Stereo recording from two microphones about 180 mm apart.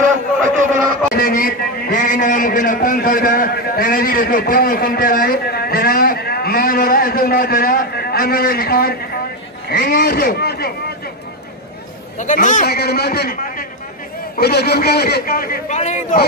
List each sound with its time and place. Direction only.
0.0 s a sound: 45° right (ahead or behind)
1.1 s a man's voice: 50° left (ahead or behind)
12.2 s a man's voice: 45° left (ahead or behind)
15.7 s a man's voice: 40° left (ahead or behind)